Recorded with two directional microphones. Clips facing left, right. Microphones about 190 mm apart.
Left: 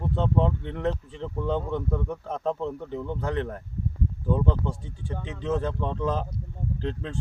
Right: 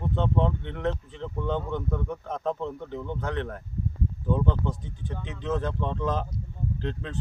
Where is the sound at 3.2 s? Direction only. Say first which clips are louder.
Left 2 dB; 35° left (ahead or behind).